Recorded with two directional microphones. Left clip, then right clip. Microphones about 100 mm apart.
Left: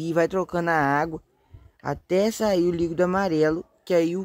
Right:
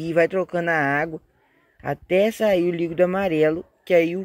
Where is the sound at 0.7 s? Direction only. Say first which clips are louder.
Right 1 dB; 20° left (ahead or behind).